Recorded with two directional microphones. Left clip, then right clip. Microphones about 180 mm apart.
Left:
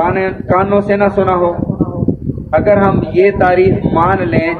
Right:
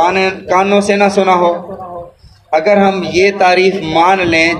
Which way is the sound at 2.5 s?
35° right (ahead or behind).